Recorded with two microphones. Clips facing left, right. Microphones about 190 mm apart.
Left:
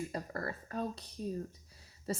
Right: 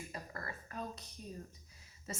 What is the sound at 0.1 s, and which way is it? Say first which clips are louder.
Speech: left 7 dB; 35° left (ahead or behind).